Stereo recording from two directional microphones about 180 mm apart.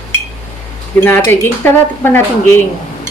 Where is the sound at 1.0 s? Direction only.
15° left (ahead or behind).